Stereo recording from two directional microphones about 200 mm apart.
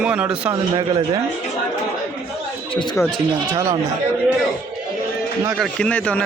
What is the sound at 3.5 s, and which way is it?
Speech, 20° right (ahead or behind).